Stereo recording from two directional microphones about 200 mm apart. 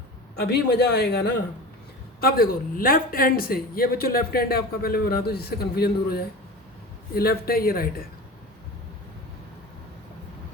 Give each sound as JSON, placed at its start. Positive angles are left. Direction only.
{"t": 0.3, "sound": "a woman's voice", "side_deg": 55}